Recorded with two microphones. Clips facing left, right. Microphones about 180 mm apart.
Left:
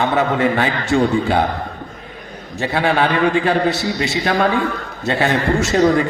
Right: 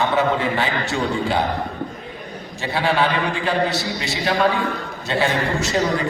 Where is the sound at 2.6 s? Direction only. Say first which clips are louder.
Left 3 dB; 50° left (ahead or behind).